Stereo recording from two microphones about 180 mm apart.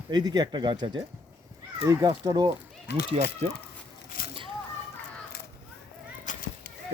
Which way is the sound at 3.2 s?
40° right (ahead or behind).